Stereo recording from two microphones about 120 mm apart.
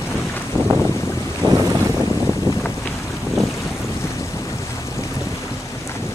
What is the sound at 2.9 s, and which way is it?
Boat, centre (ahead or behind).